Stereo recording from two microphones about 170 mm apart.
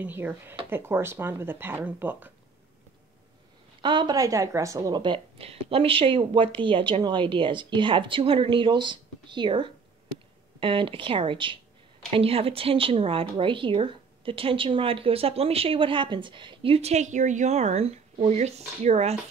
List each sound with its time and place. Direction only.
0.0 s speech: 10° right (ahead or behind)
3.8 s speech: 25° right (ahead or behind)